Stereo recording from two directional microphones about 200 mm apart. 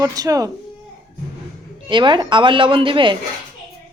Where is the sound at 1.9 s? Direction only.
25° right (ahead or behind).